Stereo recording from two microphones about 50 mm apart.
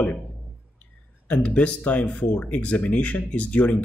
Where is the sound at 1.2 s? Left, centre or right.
Left.